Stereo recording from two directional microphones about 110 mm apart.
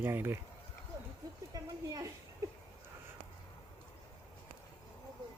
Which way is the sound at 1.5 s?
35° right (ahead or behind).